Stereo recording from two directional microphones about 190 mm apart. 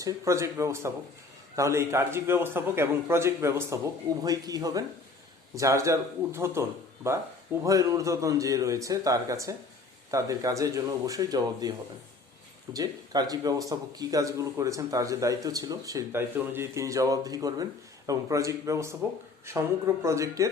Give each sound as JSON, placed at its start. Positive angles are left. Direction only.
{"t": 0.0, "sound": "a man's voice", "side_deg": -15}
{"t": 12.7, "sound": "speech", "side_deg": -20}